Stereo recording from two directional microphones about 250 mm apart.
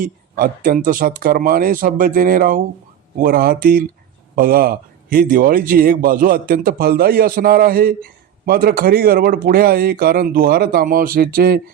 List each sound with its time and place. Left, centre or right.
0.0 s a man's voice: right